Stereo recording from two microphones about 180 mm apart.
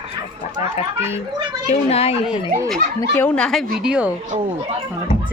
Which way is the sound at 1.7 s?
35° left (ahead or behind).